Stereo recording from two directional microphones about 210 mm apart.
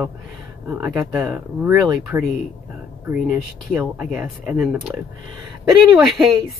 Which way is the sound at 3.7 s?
5° right (ahead or behind).